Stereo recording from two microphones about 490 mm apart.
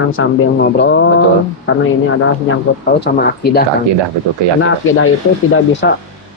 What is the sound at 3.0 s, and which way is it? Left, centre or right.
Speech, centre.